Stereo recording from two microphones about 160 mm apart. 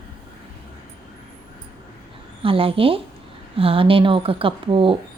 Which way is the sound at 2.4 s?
35° right (ahead or behind).